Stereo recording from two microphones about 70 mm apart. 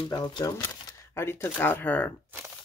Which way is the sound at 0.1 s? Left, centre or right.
Left.